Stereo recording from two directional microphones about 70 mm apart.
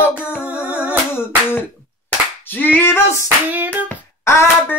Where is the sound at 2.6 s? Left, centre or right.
Left.